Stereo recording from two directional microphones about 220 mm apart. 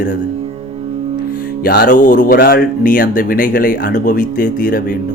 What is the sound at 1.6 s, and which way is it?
Speech, 40° left (ahead or behind).